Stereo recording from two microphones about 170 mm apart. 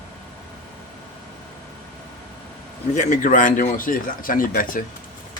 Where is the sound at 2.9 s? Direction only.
45° left (ahead or behind).